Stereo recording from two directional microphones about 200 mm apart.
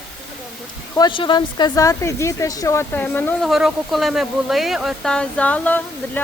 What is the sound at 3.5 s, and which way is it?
Speech, centre (ahead or behind).